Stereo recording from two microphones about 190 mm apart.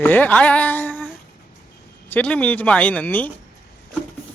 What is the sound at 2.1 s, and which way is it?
A woman's voice, 5° left (ahead or behind).